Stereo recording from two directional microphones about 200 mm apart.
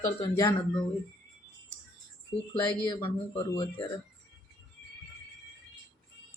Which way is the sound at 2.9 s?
20° left (ahead or behind).